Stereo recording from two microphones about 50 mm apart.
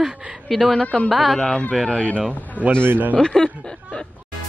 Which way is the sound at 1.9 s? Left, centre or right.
Left.